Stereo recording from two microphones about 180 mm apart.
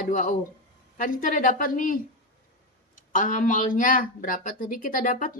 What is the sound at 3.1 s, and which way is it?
A woman's voice, 45° left (ahead or behind).